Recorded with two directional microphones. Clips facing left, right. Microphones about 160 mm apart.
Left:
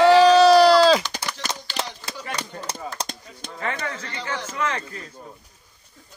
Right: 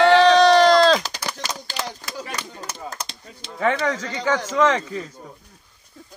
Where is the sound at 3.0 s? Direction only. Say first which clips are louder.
Left 3 dB; 30° left (ahead or behind).